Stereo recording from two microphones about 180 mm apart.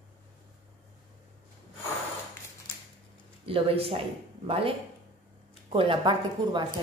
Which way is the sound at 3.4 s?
30° right (ahead or behind).